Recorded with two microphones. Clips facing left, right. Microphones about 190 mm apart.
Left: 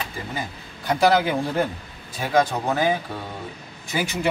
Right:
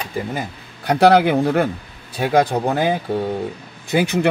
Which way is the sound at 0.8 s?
65° right (ahead or behind).